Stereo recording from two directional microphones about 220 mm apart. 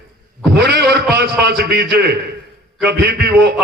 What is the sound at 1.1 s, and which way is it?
A man's voice, 50° right (ahead or behind).